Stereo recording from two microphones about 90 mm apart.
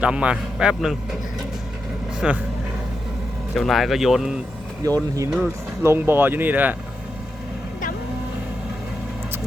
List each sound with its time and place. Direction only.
0.0 s a man's voice: 15° right (ahead or behind)
2.2 s a man's voice: 10° right (ahead or behind)
3.5 s speech: centre (ahead or behind)
4.8 s speech: 45° right (ahead or behind)
5.8 s speech: 25° right (ahead or behind)